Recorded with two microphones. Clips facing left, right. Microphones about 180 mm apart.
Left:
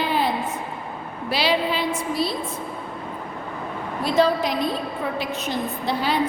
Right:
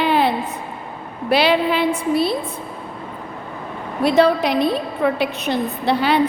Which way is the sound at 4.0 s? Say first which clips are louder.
Right 5 dB; 65° right (ahead or behind).